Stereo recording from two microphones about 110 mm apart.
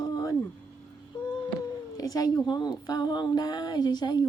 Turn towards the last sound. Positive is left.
turn(degrees=40)  # may be behind; listen again after turning